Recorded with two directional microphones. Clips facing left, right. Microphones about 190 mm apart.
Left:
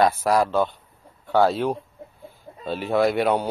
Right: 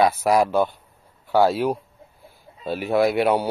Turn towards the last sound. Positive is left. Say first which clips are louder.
# right 1 dB
turn(degrees=-10)  # may be behind; listen again after turning